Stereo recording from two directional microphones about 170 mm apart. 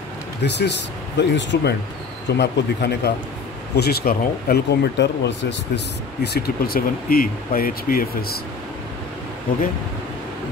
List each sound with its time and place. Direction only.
0.4 s speech: 90° left
6.2 s speech: 70° left (ahead or behind)